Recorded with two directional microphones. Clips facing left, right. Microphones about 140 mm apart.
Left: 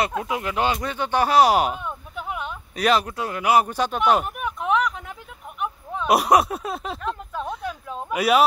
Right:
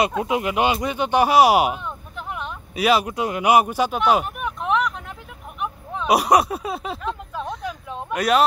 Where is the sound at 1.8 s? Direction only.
5° left (ahead or behind).